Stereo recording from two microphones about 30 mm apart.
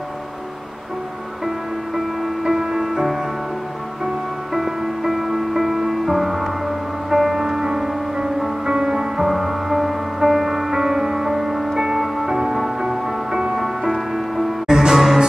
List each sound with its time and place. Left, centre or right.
2.6 s music: centre
4.6 s music: centre
14.7 s music: centre